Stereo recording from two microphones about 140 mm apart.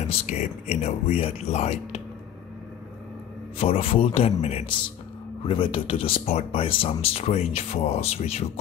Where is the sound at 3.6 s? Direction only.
40° left (ahead or behind).